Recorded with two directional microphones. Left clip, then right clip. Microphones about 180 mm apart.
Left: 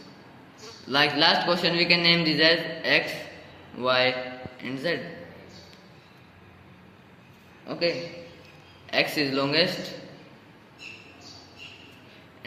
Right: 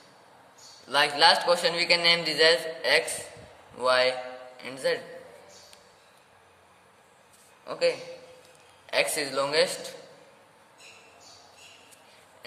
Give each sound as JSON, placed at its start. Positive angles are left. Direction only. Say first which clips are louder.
{"t": 0.9, "sound": "a man's voice", "louder": "even", "side_deg": -60}
{"t": 7.7, "sound": "a man's voice", "louder": "even", "side_deg": -70}